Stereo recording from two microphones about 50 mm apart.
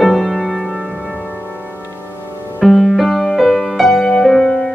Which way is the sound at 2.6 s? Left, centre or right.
Centre.